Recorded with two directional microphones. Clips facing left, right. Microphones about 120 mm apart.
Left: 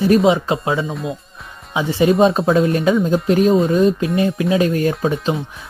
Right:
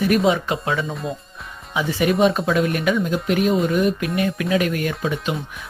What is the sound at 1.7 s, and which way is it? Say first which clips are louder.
Speech: left 4 dB; 25° left (ahead or behind).